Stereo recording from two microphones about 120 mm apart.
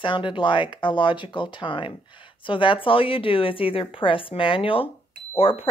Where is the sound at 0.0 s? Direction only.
45° left (ahead or behind).